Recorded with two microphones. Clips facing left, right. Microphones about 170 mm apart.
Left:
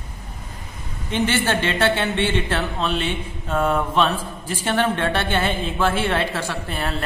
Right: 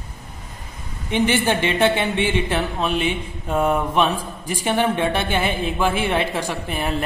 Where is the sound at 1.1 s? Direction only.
15° right (ahead or behind).